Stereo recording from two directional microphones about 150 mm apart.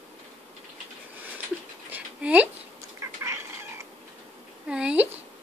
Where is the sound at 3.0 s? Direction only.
20° right (ahead or behind).